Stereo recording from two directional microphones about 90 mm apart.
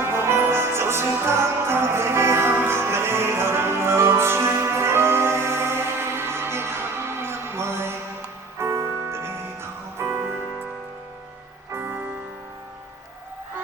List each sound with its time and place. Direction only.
0.0 s music: 25° right (ahead or behind)
11.7 s music: 25° right (ahead or behind)